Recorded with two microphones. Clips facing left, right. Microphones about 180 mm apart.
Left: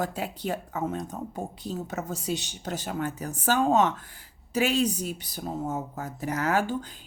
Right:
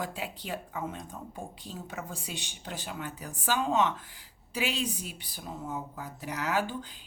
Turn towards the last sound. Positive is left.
turn(degrees=45)  # may be behind; listen again after turning